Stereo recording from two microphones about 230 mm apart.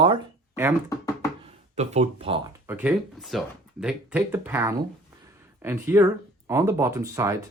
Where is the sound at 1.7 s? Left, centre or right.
Right.